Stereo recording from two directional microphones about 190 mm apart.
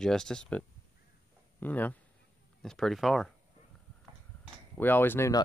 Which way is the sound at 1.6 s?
10° left (ahead or behind).